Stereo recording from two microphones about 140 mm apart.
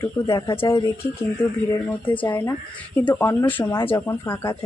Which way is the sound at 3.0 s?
15° left (ahead or behind).